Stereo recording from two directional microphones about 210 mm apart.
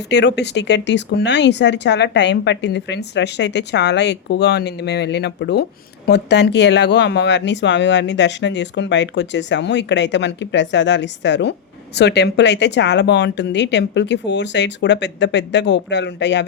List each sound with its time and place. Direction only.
0.1 s speech: 55° left (ahead or behind)